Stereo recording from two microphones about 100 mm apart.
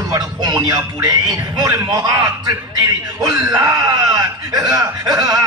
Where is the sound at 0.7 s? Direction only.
40° right (ahead or behind).